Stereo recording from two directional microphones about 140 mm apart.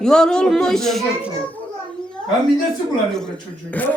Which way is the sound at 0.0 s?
5° left (ahead or behind).